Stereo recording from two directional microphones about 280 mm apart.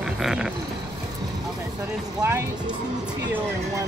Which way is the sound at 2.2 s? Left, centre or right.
Centre.